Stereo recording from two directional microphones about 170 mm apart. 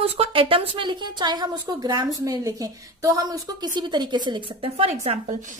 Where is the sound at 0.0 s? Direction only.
35° right (ahead or behind).